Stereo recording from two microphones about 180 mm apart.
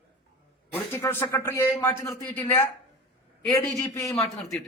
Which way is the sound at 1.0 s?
10° left (ahead or behind).